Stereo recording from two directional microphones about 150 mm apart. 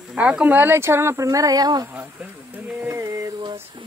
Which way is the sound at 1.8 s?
10° right (ahead or behind).